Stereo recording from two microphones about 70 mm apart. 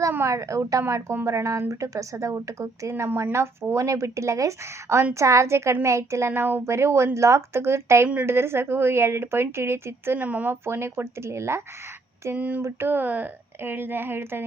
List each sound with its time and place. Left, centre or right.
0.3 s a woman's voice: right
8.0 s speech: right
8.3 s a woman's voice: right
10.2 s speech: right
10.5 s a woman's voice: right
12.4 s a woman's voice: right